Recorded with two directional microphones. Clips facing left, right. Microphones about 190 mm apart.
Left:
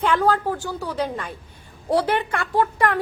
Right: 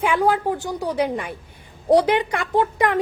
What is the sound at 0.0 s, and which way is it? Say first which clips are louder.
A woman's voice: right 1 dB; 10° right (ahead or behind).